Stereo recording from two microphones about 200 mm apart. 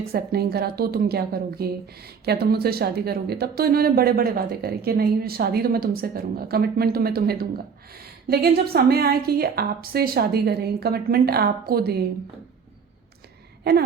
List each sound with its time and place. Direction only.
0.1 s a woman's voice: 50° right (ahead or behind)